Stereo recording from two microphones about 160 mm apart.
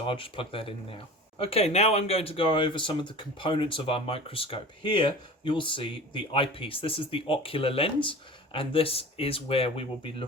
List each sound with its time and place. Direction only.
0.0 s speech: 35° left (ahead or behind)